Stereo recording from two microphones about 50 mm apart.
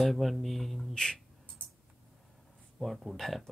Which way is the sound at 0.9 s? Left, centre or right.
Centre.